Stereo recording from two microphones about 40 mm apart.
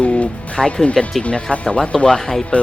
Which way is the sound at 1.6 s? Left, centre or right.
Centre.